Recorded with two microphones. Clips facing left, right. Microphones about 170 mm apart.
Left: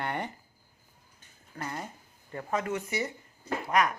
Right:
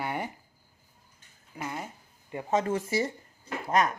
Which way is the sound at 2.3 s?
25° right (ahead or behind).